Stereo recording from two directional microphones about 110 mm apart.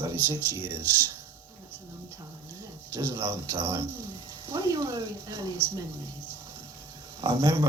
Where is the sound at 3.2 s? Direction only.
25° right (ahead or behind).